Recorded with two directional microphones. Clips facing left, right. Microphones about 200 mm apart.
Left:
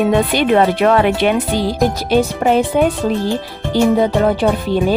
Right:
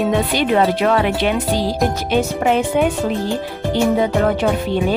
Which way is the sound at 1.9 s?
35° left (ahead or behind).